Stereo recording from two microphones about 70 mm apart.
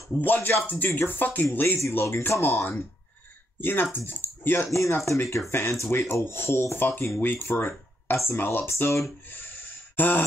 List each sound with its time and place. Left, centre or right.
0.2 s speech: left
1.8 s speech: left
4.7 s speech: left
9.9 s a sound: left